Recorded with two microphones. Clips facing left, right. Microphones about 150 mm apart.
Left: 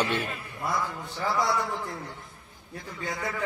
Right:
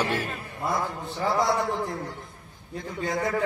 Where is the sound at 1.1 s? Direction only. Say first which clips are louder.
Right 3 dB; 25° right (ahead or behind).